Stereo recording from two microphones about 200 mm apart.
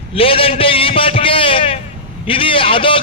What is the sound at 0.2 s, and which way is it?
A man's voice, 25° left (ahead or behind).